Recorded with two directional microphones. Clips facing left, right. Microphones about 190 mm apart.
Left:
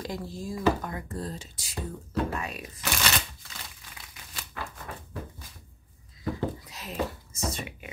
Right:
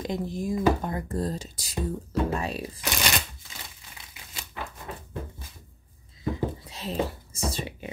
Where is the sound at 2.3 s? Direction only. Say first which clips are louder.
Right 5 dB; 30° right (ahead or behind).